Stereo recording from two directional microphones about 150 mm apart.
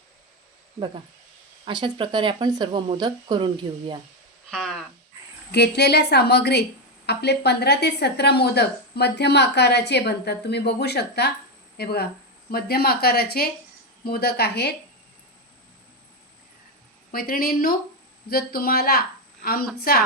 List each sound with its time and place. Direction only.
1.6 s speech: 35° right (ahead or behind)
4.5 s a sound: centre (ahead or behind)
5.5 s a woman's voice: 90° left
17.1 s a woman's voice: 75° left (ahead or behind)